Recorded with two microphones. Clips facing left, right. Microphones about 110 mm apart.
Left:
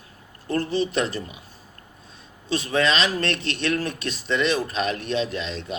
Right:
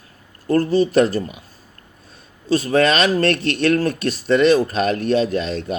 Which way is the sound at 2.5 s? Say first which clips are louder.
Right 6 dB; 40° right (ahead or behind).